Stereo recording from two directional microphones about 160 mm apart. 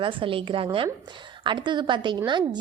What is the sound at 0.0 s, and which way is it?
A woman's voice, 30° right (ahead or behind).